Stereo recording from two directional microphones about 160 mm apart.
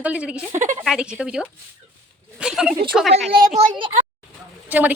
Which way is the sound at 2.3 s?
5° right (ahead or behind).